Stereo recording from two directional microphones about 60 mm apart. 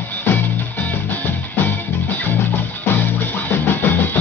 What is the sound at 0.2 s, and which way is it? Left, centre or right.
Music, left.